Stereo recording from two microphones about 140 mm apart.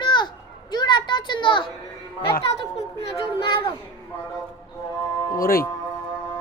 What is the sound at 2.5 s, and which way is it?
Speech, 50° left (ahead or behind).